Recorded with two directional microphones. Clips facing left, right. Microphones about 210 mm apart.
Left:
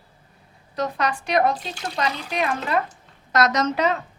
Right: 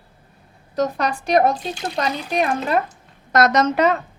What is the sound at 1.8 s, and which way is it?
Speech, 40° right (ahead or behind).